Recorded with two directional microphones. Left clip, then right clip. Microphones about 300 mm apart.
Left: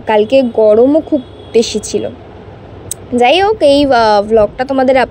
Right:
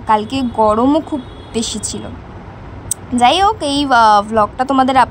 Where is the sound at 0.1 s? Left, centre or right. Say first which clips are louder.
Left 6 dB; centre.